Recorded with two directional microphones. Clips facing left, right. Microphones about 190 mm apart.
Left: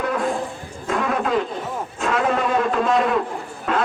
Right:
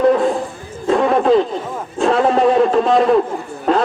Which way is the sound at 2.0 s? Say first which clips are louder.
Right 8 dB; 30° right (ahead or behind).